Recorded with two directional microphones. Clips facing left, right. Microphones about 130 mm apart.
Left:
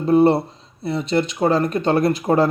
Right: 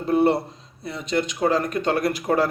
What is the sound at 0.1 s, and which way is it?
Speech, 25° left (ahead or behind).